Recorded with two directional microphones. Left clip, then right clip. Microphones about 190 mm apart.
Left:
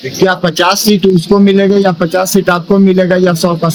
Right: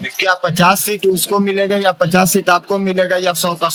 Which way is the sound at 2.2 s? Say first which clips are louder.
Left 2 dB; 45° right (ahead or behind).